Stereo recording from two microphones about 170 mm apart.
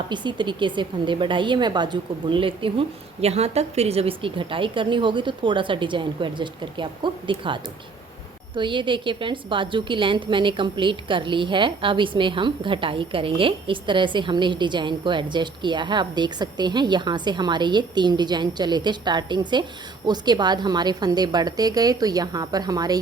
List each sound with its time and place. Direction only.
0.1 s a woman's voice: 25° right (ahead or behind)